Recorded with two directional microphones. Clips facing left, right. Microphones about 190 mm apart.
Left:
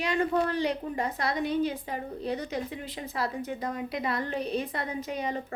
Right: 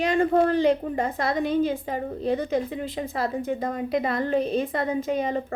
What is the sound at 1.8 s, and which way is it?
A woman's voice, 45° right (ahead or behind).